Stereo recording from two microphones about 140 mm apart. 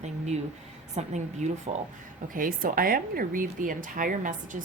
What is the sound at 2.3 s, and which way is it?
Speech, 80° right.